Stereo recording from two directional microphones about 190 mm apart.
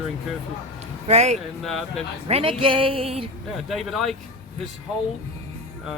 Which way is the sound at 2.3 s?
30° right (ahead or behind).